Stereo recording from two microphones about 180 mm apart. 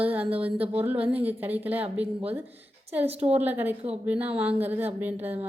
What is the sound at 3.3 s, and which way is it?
A woman's voice, 10° right (ahead or behind).